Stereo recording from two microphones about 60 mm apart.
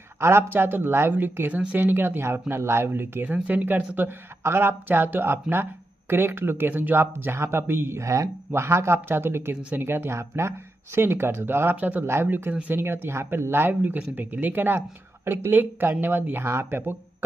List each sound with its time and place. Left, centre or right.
0.2 s speech: right
1.5 s speech: right
1.8 s speech: right
3.3 s speech: right
4.4 s speech: right
8.5 s speech: right
12.6 s speech: right